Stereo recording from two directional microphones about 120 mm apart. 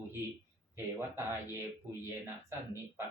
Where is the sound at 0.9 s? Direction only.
20° right (ahead or behind).